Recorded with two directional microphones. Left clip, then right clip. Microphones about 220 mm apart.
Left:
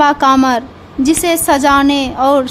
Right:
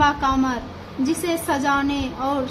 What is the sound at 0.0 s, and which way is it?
A woman's voice, 60° left (ahead or behind).